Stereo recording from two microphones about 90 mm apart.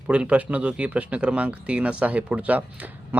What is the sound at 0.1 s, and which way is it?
A man's voice, 15° right (ahead or behind).